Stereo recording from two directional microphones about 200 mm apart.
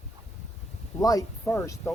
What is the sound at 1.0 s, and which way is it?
Speech, 15° left (ahead or behind).